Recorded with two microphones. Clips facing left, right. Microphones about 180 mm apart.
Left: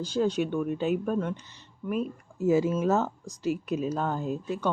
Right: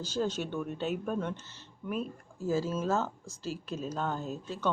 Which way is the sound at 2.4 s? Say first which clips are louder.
Left 7 dB; 20° left (ahead or behind).